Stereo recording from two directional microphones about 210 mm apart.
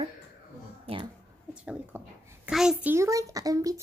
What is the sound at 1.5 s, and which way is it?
A child's voice, 5° right (ahead or behind).